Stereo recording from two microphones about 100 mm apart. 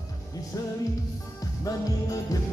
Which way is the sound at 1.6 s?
35° left (ahead or behind).